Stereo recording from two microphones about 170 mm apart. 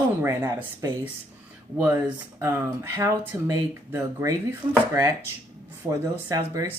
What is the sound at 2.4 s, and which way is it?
Speech, 15° right (ahead or behind).